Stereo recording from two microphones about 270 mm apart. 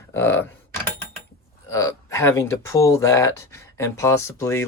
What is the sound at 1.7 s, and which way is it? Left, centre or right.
Speech, centre.